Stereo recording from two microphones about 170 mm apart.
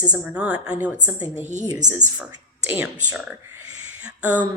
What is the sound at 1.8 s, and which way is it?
Speech, 45° right (ahead or behind).